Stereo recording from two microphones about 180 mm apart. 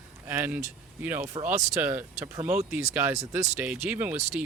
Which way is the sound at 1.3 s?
40° right (ahead or behind).